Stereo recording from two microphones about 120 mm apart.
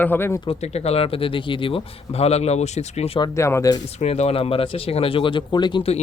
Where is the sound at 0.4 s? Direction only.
60° left (ahead or behind).